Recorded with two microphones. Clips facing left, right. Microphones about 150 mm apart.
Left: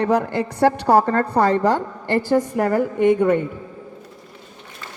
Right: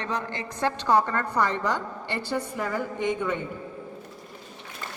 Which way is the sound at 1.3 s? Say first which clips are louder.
Left 8 dB; 60° left (ahead or behind).